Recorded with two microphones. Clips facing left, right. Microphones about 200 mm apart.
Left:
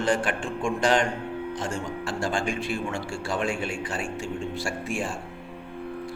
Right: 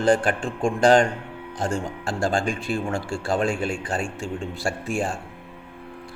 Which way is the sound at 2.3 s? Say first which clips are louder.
Right 3 dB; 35° right (ahead or behind).